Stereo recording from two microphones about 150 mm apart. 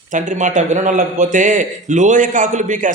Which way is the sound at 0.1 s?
55° right (ahead or behind).